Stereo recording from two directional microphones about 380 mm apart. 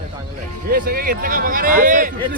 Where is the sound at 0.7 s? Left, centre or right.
Right.